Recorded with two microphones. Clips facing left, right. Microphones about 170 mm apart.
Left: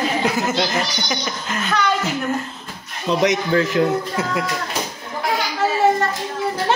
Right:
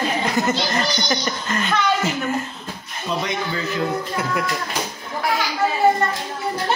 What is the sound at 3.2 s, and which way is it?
Speech, 80° left.